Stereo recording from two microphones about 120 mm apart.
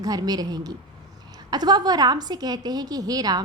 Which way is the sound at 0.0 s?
35° right (ahead or behind).